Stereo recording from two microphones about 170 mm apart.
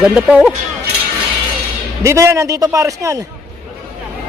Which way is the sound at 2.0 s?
15° right (ahead or behind).